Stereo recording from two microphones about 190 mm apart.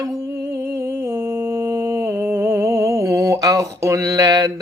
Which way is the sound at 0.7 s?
15° right (ahead or behind).